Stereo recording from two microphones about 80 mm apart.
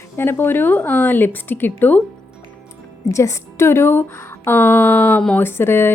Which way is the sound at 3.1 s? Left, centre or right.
Left.